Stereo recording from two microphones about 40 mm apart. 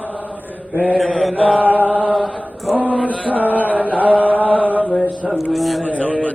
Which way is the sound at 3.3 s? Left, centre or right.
Right.